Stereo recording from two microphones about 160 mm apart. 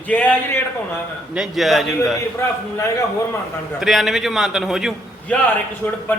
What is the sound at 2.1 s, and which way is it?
Speech, 20° left (ahead or behind).